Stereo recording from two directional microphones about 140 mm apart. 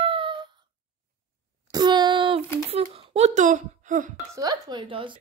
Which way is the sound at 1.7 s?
30° right (ahead or behind).